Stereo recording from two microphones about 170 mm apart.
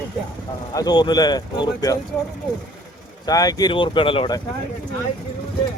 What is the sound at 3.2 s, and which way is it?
Speech, 20° left (ahead or behind).